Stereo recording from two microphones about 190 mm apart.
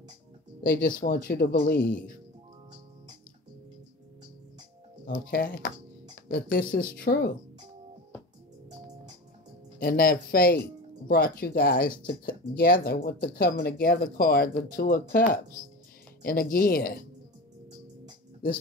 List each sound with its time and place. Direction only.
0.7 s speech: 50° left (ahead or behind)
5.0 s speech: 50° left (ahead or behind)
9.8 s speech: 50° left (ahead or behind)